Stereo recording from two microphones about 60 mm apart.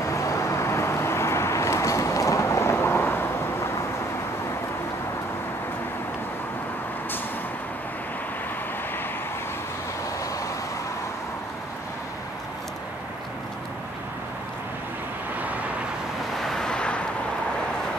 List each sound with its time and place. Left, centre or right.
0.0 s vehicle: left
16.3 s vehicle: centre